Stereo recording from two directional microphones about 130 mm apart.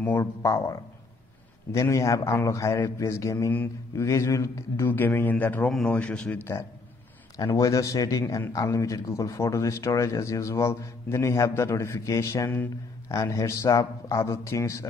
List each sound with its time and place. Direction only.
0.2 s a man's voice: 25° left (ahead or behind)
5.7 s speech: centre (ahead or behind)
5.9 s speech: 10° left (ahead or behind)
7.3 s a man's voice: 25° left (ahead or behind)